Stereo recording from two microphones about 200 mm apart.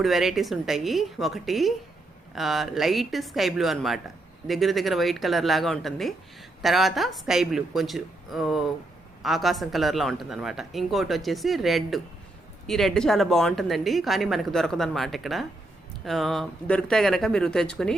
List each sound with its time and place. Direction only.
0.0 s speech: centre (ahead or behind)